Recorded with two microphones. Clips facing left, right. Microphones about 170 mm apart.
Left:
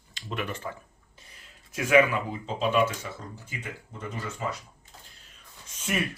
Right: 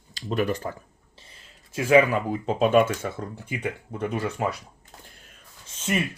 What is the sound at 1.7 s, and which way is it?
Speech, 30° right (ahead or behind).